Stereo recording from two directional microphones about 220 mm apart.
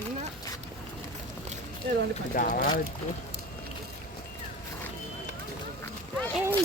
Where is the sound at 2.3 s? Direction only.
40° left (ahead or behind).